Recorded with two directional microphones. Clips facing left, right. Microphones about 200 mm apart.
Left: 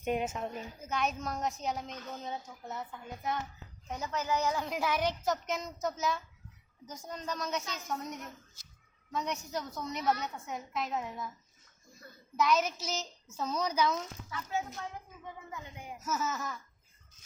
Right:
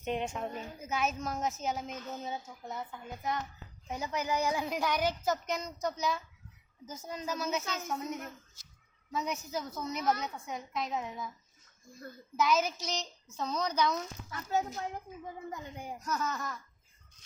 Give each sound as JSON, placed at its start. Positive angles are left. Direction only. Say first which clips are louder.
{"t": 0.0, "sound": "a woman's voice", "louder": "left 2 dB", "side_deg": 10}
{"t": 3.8, "sound": "speech", "louder": "even", "side_deg": -10}
{"t": 4.7, "sound": "a woman's voice", "louder": "even", "side_deg": 0}
{"t": 9.1, "sound": "a woman's voice", "louder": "even", "side_deg": -5}
{"t": 12.4, "sound": "a woman's voice", "louder": "even", "side_deg": 0}
{"t": 14.5, "sound": "speech", "louder": "right 5 dB", "side_deg": -40}
{"t": 16.0, "sound": "a woman's voice", "louder": "left 1 dB", "side_deg": 5}